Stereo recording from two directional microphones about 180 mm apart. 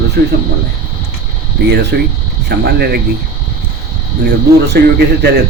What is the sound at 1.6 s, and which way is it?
Speech, 70° right (ahead or behind).